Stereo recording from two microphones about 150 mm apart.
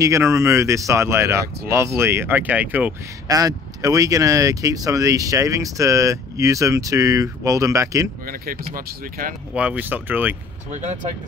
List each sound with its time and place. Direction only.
0.0 s speech: 20° right (ahead or behind)
3.3 s speech: 25° right (ahead or behind)
8.3 s speech: 70° right (ahead or behind)
9.5 s speech: 10° right (ahead or behind)
10.7 s speech: 50° right (ahead or behind)